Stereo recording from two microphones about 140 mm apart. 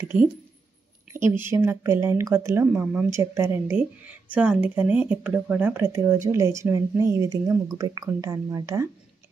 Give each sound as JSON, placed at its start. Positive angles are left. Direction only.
{"t": 0.0, "sound": "speech", "side_deg": -15}